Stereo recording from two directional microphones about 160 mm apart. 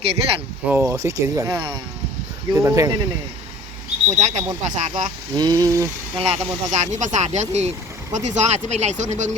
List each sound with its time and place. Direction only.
0.0 s speech: 35° right (ahead or behind)
0.7 s speech: 15° right (ahead or behind)
4.1 s speech: 45° right (ahead or behind)
5.4 s speech: 25° right (ahead or behind)
6.1 s speech: 40° right (ahead or behind)